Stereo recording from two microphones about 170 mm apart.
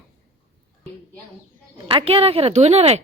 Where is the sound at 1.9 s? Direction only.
35° right (ahead or behind).